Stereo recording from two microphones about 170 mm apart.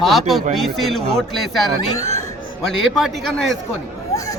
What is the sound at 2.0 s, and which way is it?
Speech, 40° right (ahead or behind).